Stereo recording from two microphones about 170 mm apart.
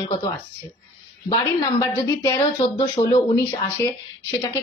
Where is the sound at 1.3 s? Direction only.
20° left (ahead or behind).